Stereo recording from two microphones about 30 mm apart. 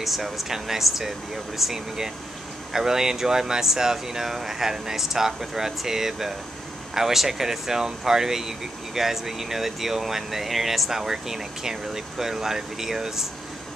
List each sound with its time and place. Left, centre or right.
0.0 s speech: centre